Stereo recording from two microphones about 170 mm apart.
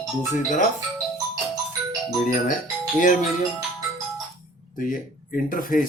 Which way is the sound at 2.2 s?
50° left (ahead or behind).